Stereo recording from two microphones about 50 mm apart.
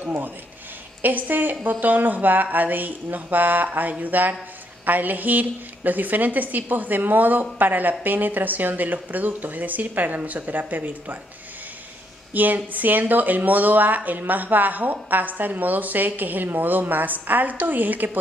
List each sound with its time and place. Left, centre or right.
0.0 s speech: right
12.4 s speech: right